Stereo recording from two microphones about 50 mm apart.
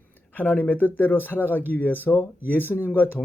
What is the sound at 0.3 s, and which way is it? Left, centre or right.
Speech, left.